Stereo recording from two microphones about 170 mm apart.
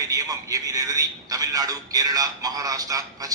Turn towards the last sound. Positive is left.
turn(degrees=-20)  # may be behind; listen again after turning